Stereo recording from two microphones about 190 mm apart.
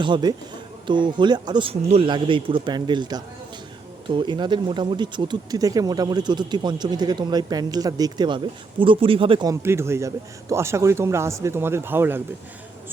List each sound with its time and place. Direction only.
0.0 s speech: 25° right (ahead or behind)